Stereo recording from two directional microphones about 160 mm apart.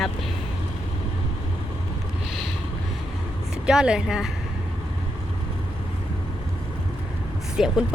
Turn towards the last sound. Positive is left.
turn(degrees=-5)  # may be behind; listen again after turning